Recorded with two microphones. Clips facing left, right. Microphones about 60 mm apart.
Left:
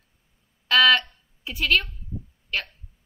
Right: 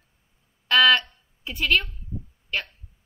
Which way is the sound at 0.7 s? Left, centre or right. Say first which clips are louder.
Even; centre.